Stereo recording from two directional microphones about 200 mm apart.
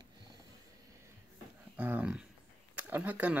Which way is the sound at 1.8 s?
10° right (ahead or behind).